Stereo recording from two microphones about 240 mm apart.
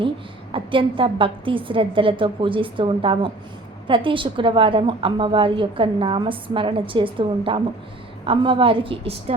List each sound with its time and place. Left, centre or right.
0.5 s a woman's voice: right